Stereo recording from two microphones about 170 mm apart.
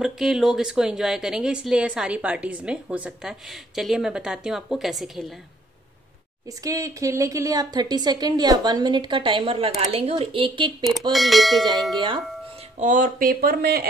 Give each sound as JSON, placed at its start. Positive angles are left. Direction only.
{"t": 0.0, "sound": "speech", "side_deg": 0}
{"t": 6.6, "sound": "a woman's voice", "side_deg": -20}
{"t": 10.9, "sound": "speech", "side_deg": 0}
{"t": 12.8, "sound": "speech", "side_deg": -50}